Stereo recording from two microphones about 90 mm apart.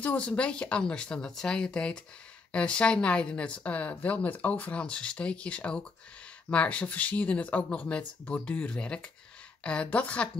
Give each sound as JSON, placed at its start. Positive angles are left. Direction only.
{"t": 0.0, "sound": "a woman's voice", "side_deg": 15}